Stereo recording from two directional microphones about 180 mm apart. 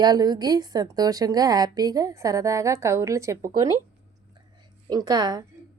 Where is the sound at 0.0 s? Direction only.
20° right (ahead or behind).